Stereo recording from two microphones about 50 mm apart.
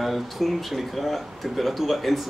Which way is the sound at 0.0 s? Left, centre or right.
Centre.